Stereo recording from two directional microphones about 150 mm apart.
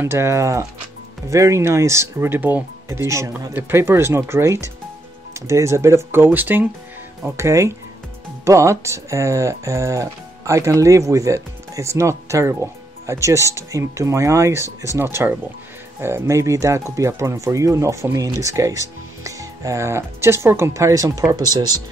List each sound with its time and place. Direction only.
0.0 s speech: 15° right (ahead or behind)